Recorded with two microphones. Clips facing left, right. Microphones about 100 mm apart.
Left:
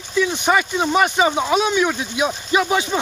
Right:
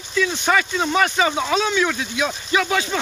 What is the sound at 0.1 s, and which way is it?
Speech, 20° left (ahead or behind).